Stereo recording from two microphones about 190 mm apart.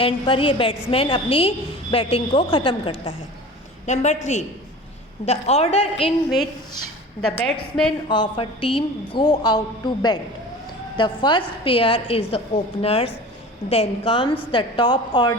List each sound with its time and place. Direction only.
0.0 s a woman's voice: 30° left (ahead or behind)
7.2 s a woman's voice: 5° left (ahead or behind)
8.0 s a woman's voice: 25° left (ahead or behind)